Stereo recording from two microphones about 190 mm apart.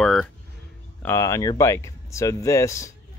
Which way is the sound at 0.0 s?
Centre (ahead or behind).